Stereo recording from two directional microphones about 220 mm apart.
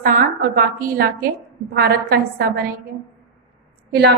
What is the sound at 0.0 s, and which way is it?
A woman's voice, 40° right (ahead or behind).